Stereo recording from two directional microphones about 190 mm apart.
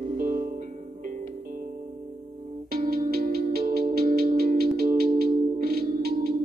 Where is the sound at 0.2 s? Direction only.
45° right (ahead or behind).